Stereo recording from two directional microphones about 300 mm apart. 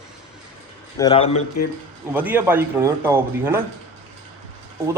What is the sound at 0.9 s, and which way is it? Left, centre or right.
Speech, centre.